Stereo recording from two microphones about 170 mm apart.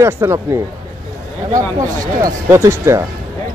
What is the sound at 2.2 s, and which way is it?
Speech, 15° right (ahead or behind).